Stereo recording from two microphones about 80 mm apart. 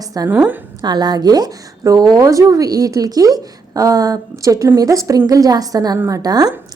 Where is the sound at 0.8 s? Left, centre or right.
Right.